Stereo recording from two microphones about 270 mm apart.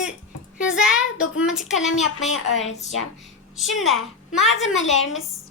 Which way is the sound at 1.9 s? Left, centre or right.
Left.